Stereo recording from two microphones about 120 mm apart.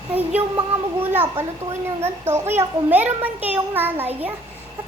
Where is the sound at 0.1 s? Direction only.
15° right (ahead or behind).